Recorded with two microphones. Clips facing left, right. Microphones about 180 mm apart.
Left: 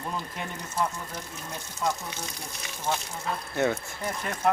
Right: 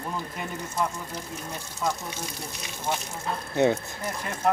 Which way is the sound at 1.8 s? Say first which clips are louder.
Even; centre (ahead or behind).